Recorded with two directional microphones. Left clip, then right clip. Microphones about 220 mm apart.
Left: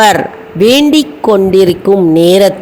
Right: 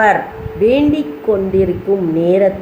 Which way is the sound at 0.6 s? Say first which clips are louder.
Left 6 dB; 45° left (ahead or behind).